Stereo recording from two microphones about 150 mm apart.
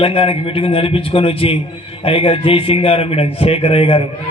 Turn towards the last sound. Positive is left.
turn(degrees=40)  # may be behind; listen again after turning